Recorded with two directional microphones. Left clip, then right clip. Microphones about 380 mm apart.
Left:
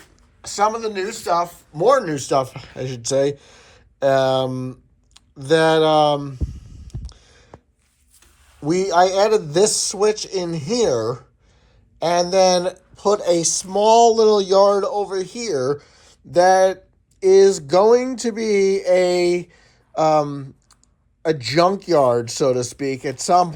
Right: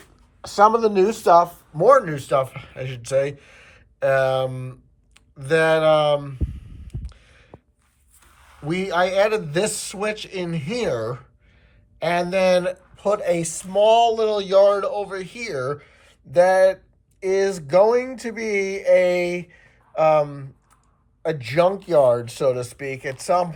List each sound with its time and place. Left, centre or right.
0.0 s speech: centre
7.0 s a sound: centre
8.2 s speech: centre
21.4 s speech: left
23.1 s speech: centre